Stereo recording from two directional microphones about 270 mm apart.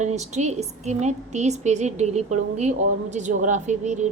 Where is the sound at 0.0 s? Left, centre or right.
Right.